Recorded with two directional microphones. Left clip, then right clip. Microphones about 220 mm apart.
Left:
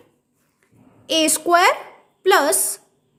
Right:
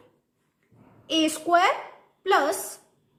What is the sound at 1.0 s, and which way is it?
A woman's voice, 40° left (ahead or behind).